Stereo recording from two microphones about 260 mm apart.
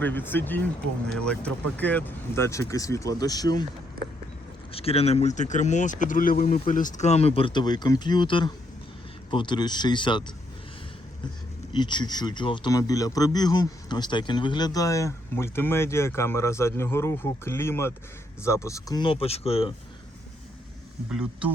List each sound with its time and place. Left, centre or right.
0.0 s speech: centre
4.7 s speech: left
11.7 s speech: centre
21.1 s speech: centre